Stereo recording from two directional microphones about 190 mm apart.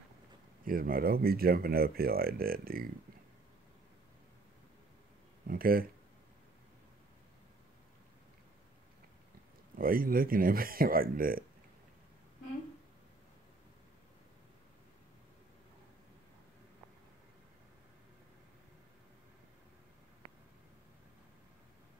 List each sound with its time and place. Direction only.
0.7 s speech: 50° right (ahead or behind)
5.5 s speech: 50° right (ahead or behind)
9.8 s speech: 50° right (ahead or behind)